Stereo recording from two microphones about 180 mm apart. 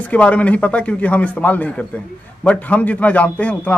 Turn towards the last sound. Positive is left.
turn(degrees=10)  # may be behind; listen again after turning